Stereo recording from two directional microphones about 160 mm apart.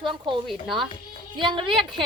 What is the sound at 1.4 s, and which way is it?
Speech, 30° right (ahead or behind).